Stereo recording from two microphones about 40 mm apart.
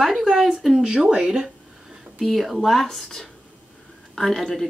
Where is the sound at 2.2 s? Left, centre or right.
Centre.